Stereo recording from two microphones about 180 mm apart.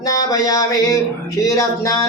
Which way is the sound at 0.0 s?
20° left (ahead or behind).